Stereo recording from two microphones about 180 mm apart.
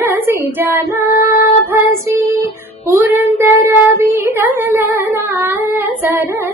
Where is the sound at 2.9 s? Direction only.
15° right (ahead or behind).